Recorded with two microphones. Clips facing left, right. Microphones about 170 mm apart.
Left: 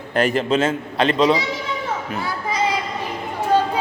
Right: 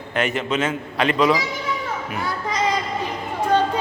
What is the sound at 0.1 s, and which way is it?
A man's voice, 35° left (ahead or behind).